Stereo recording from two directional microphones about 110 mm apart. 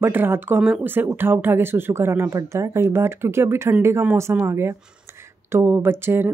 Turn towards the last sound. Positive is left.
turn(degrees=-20)  # may be behind; listen again after turning